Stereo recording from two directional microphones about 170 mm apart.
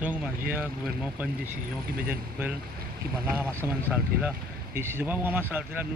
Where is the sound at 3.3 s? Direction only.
5° right (ahead or behind).